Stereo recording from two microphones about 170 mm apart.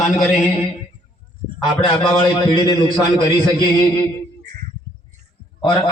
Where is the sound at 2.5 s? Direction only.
25° left (ahead or behind).